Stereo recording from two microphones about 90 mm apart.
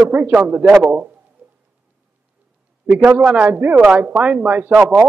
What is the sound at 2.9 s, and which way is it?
Speech, 15° right (ahead or behind).